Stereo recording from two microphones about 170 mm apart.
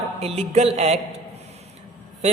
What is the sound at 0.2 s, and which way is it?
Speech, 40° right (ahead or behind).